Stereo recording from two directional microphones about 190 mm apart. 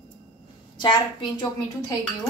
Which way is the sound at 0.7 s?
25° left (ahead or behind).